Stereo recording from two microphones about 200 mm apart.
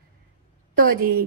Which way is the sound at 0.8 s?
45° right (ahead or behind).